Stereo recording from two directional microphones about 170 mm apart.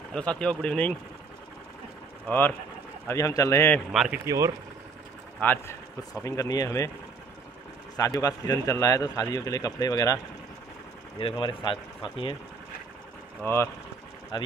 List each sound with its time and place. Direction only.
0.1 s speech: 5° left (ahead or behind)
2.2 s a man's voice: 10° left (ahead or behind)
3.9 s speech: centre (ahead or behind)
5.4 s a man's voice: 10° left (ahead or behind)
8.0 s speech: 20° left (ahead or behind)
11.1 s speech: 30° left (ahead or behind)
13.4 s a man's voice: 15° left (ahead or behind)
14.3 s speech: 25° left (ahead or behind)